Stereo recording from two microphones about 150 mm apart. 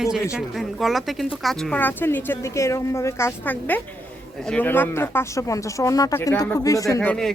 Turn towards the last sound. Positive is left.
turn(degrees=15)  # may be behind; listen again after turning